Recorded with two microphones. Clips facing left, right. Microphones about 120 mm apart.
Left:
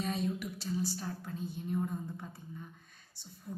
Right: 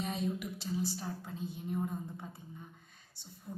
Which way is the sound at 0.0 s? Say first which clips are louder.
Left 1 dB; 20° right (ahead or behind).